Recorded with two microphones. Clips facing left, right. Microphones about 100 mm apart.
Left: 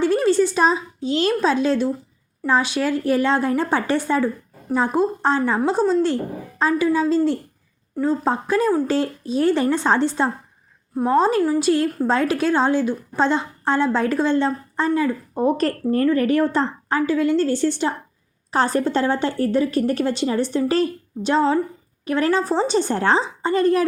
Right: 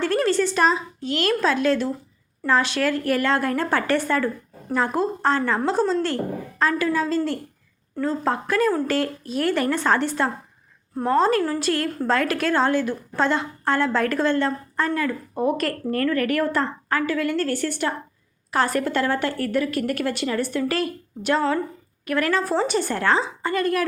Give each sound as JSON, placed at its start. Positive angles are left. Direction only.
{"t": 0.0, "sound": "a woman's voice", "side_deg": 15}
{"t": 15.4, "sound": "speech", "side_deg": 30}